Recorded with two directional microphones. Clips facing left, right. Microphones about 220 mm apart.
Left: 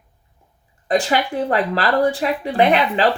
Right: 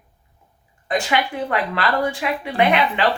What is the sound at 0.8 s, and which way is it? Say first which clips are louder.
A woman's voice: left 3 dB; 35° left (ahead or behind).